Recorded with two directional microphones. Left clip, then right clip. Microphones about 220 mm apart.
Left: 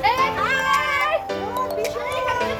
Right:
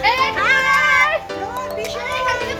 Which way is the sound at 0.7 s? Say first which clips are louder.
Right 5 dB; 5° right (ahead or behind).